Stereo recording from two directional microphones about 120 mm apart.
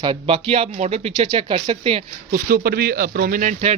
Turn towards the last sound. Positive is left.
turn(degrees=-80)